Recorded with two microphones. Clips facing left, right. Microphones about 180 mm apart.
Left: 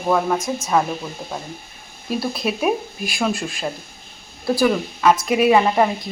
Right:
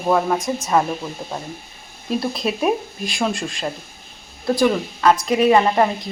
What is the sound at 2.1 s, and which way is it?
Speech, 5° left (ahead or behind).